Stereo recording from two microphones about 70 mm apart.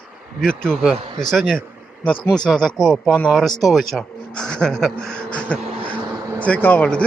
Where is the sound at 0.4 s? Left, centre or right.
Centre.